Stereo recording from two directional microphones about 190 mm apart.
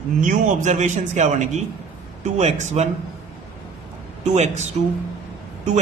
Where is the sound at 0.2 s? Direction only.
40° right (ahead or behind).